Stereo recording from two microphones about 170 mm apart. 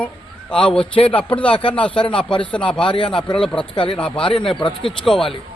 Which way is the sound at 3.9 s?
5° left (ahead or behind).